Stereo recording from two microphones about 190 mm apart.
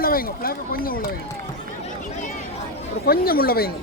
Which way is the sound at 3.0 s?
50° left (ahead or behind).